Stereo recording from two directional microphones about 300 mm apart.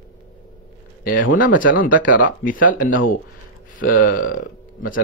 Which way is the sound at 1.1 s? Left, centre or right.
Left.